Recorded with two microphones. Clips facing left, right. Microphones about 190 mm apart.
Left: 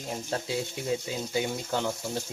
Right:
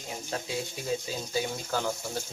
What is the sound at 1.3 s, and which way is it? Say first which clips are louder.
Speech: left 1 dB; 20° left (ahead or behind).